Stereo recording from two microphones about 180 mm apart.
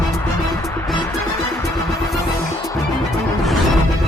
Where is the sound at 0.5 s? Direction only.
15° left (ahead or behind).